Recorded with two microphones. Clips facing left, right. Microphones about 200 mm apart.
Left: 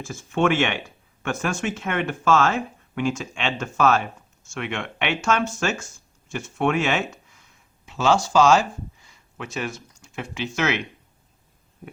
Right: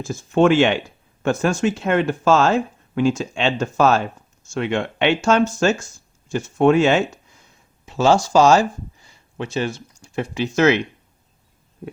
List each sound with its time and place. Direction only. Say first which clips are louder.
0.0 s speech: right 6 dB; 35° right (ahead or behind)
9.0 s speech: right 12 dB; 30° right (ahead or behind)